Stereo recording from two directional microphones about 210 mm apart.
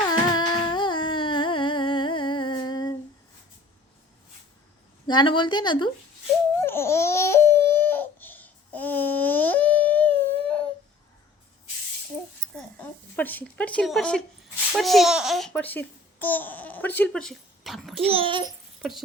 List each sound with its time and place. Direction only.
0.1 s a sound: 20° left (ahead or behind)
5.0 s speech: 20° left (ahead or behind)
6.6 s babbling: 10° left (ahead or behind)
12.5 s a child's voice: 10° left (ahead or behind)
17.9 s a child's voice: 25° right (ahead or behind)
18.8 s speech: centre (ahead or behind)